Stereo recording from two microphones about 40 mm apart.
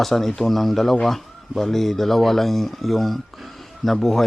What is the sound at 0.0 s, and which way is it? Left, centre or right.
Speech, centre.